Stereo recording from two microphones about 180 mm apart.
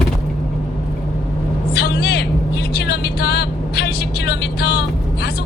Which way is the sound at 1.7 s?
65° left (ahead or behind).